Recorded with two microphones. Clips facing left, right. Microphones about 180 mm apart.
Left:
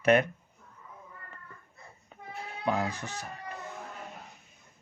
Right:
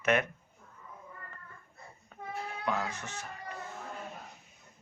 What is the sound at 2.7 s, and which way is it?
Speech, 35° left (ahead or behind).